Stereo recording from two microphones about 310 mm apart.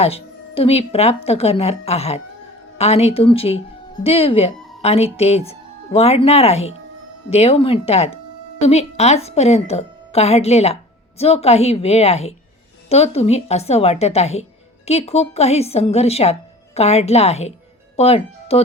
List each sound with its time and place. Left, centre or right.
0.0 s speech: centre